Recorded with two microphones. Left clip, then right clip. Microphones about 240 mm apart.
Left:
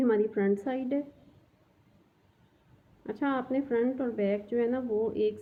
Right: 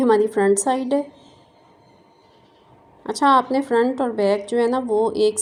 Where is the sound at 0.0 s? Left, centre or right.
Centre.